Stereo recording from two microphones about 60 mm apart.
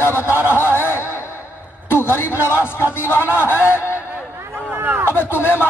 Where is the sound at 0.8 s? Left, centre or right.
Left.